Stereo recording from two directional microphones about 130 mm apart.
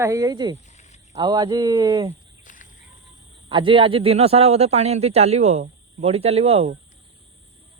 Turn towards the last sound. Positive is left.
turn(degrees=-50)  # may be behind; listen again after turning